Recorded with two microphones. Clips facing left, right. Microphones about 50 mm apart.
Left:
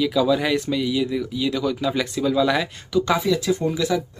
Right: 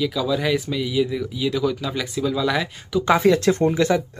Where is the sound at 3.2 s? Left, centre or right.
Right.